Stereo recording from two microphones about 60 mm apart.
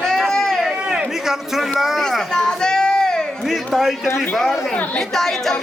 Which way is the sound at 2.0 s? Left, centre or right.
Centre.